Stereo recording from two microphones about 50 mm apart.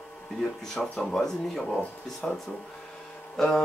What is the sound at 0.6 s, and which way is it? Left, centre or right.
Speech, centre.